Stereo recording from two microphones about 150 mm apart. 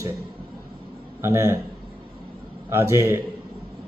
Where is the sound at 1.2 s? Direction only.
20° right (ahead or behind).